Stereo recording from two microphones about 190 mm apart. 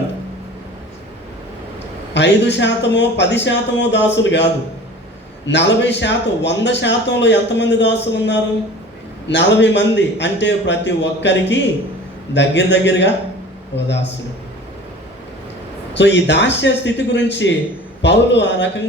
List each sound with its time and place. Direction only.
2.1 s a man's voice: 65° left (ahead or behind)
5.5 s a man's voice: 65° left (ahead or behind)
16.0 s a man's voice: 65° left (ahead or behind)